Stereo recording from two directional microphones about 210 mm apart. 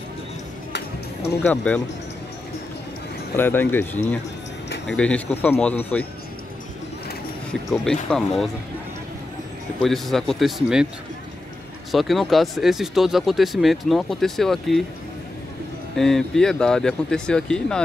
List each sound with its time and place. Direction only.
0.7 s music: 50° left (ahead or behind)
1.4 s speech: 5° left (ahead or behind)
3.3 s speech: 10° left (ahead or behind)
7.7 s speech: 5° left (ahead or behind)
9.8 s speech: centre (ahead or behind)
11.9 s speech: centre (ahead or behind)
16.0 s speech: centre (ahead or behind)